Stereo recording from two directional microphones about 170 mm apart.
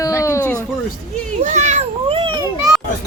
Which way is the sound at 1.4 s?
45° right (ahead or behind).